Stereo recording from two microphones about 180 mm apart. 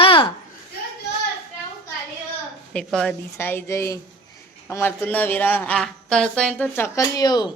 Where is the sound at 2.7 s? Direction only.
5° left (ahead or behind); by 7.5 s 20° left (ahead or behind).